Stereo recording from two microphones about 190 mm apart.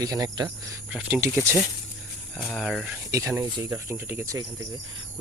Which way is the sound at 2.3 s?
Centre (ahead or behind).